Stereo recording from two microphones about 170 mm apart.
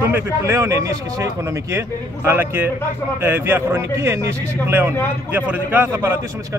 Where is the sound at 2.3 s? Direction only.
10° right (ahead or behind).